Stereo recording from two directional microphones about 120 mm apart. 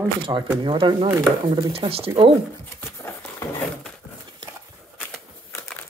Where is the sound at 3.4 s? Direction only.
20° left (ahead or behind).